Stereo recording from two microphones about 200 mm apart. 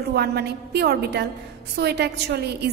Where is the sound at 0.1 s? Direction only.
55° right (ahead or behind).